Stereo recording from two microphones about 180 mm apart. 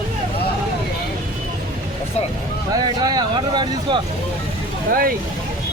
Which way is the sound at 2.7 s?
20° right (ahead or behind).